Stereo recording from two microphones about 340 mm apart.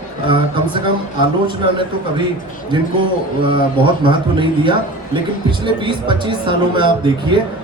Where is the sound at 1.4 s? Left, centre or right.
Centre.